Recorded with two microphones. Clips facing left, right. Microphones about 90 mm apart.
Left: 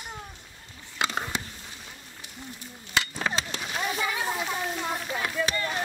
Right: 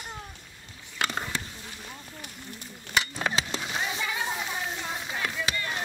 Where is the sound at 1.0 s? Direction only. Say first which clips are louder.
Left 1 dB; 15° left (ahead or behind).